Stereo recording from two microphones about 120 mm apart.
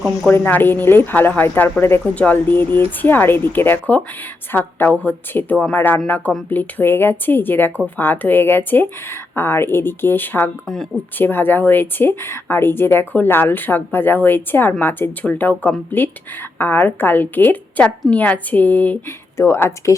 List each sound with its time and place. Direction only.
0.3 s speech: 15° left (ahead or behind)